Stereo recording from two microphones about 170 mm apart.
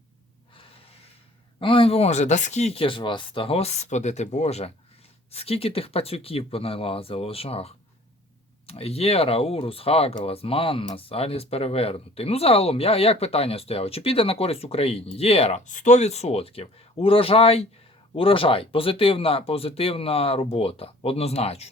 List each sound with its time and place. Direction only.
1.5 s speech: 30° left (ahead or behind)